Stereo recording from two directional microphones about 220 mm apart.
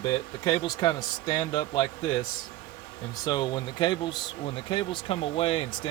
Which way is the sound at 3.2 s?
20° left (ahead or behind).